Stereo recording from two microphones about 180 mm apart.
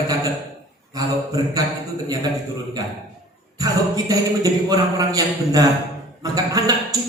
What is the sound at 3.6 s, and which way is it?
A man's voice, 20° right (ahead or behind).